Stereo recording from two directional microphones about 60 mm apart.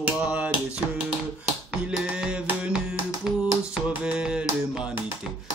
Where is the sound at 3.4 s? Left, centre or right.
Centre.